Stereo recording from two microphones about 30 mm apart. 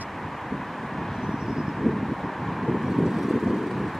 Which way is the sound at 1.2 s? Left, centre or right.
Centre.